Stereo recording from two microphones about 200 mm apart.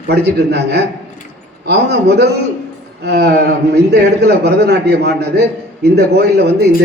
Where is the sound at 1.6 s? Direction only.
55° right (ahead or behind).